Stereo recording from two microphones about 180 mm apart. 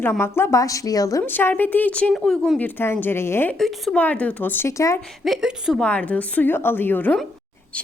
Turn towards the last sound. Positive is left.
turn(degrees=10)  # may be behind; listen again after turning